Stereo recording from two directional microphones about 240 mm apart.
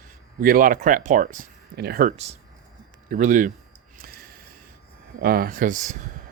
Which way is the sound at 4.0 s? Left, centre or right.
Right.